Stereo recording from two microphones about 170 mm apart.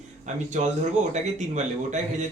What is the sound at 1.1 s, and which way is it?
Speech, 45° right (ahead or behind).